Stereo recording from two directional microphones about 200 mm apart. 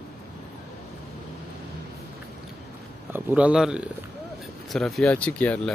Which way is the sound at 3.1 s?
10° right (ahead or behind).